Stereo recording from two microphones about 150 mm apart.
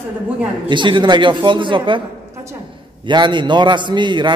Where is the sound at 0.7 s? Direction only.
30° right (ahead or behind).